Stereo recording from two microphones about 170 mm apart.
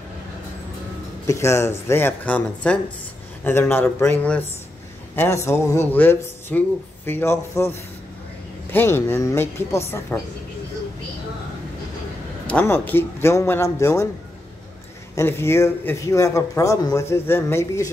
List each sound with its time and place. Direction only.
1.2 s a man's voice: 15° left (ahead or behind)
8.7 s a man's voice: 15° left (ahead or behind)
12.4 s a man's voice: 10° left (ahead or behind)
15.1 s a man's voice: 15° left (ahead or behind)